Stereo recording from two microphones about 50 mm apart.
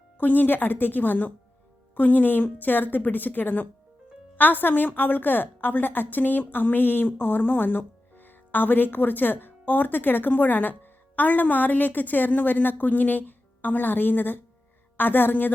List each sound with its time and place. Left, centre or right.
0.2 s a woman's voice: left